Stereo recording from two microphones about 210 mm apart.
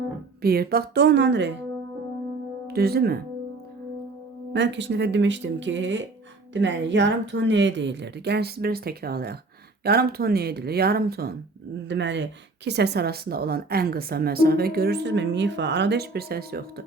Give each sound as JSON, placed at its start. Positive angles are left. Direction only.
{"t": 0.4, "sound": "speech", "side_deg": -45}
{"t": 2.6, "sound": "speech", "side_deg": -50}
{"t": 4.5, "sound": "speech", "side_deg": -55}